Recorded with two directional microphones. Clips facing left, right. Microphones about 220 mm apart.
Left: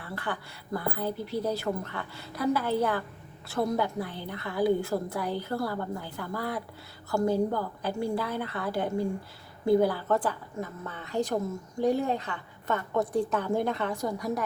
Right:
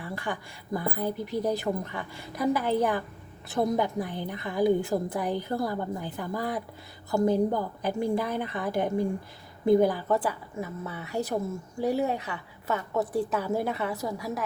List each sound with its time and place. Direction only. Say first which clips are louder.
0.0 s a woman's voice: right 1 dB; 15° right (ahead or behind)